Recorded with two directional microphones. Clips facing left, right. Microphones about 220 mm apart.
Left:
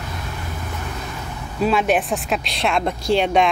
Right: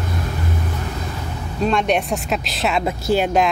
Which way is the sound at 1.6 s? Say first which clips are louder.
Even; 5° left (ahead or behind).